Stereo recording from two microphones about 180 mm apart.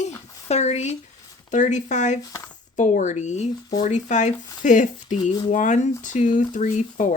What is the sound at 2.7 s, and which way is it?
Speech, 45° left (ahead or behind).